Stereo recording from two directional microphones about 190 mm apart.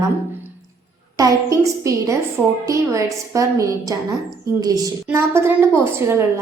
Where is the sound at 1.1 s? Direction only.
15° right (ahead or behind).